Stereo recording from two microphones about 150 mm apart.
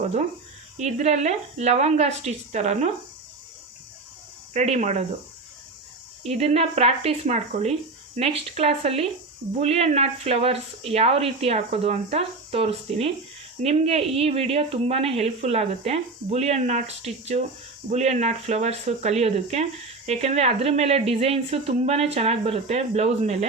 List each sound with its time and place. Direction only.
0.0 s speech: 55° right (ahead or behind)
4.5 s speech: 45° right (ahead or behind)
6.2 s speech: 45° right (ahead or behind)